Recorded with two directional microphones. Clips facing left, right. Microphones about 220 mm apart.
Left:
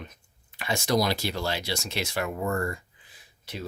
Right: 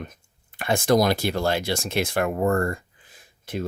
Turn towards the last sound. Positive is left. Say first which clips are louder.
# right 8 dB
turn(degrees=-50)  # may be behind; listen again after turning